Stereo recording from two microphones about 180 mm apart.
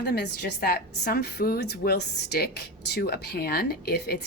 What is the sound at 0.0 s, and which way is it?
A woman's voice, 65° left (ahead or behind).